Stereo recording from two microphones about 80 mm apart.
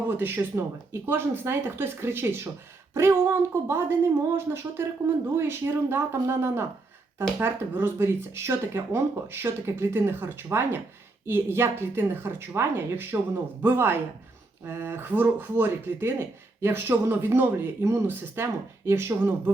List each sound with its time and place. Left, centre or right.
0.2 s speech: right